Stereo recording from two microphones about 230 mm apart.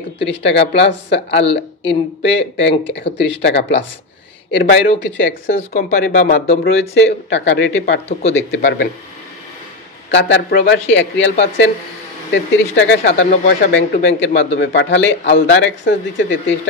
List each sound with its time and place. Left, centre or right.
0.3 s a man's voice: left
1.4 s speech: left
1.9 s a man's voice: left
10.1 s a man's voice: left
12.7 s a man's voice: left